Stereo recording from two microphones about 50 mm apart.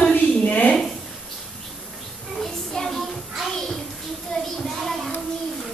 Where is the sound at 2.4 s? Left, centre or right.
Centre.